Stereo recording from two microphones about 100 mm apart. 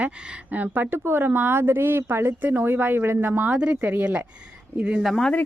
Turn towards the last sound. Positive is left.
turn(degrees=5)  # may be behind; listen again after turning